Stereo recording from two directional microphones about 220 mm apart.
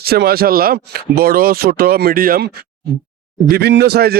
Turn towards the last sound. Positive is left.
turn(degrees=-45)  # may be behind; listen again after turning